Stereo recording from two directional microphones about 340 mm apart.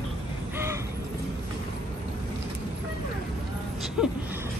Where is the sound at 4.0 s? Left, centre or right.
Centre.